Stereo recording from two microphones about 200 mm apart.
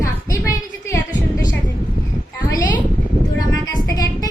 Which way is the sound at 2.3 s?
20° left (ahead or behind).